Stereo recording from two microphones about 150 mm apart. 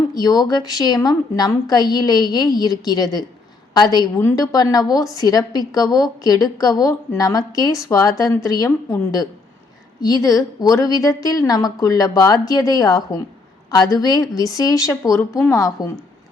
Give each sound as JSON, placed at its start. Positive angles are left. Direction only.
{"t": 0.1, "sound": "a woman's voice", "side_deg": 25}